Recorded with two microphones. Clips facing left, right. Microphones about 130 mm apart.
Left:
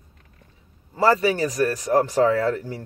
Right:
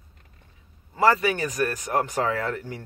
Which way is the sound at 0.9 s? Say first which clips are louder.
Left 2 dB; 35° left (ahead or behind).